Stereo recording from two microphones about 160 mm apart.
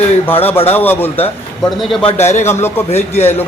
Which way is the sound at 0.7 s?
10° left (ahead or behind).